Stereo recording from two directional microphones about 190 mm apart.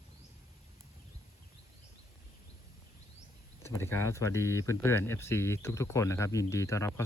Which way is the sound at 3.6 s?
15° left (ahead or behind).